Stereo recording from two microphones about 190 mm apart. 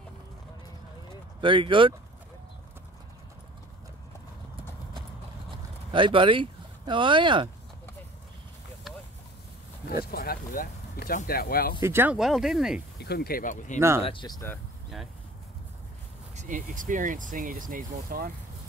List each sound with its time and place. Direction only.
1.4 s speech: 25° right (ahead or behind)
5.5 s vehicle: 25° right (ahead or behind)
10.1 s speech: 50° left (ahead or behind)
11.8 s speech: 10° right (ahead or behind)
12.2 s speech: centre (ahead or behind)
13.0 s speech: 55° left (ahead or behind)
13.7 s speech: 15° right (ahead or behind)
14.0 s speech: 25° left (ahead or behind)
16.3 s speech: 45° right (ahead or behind)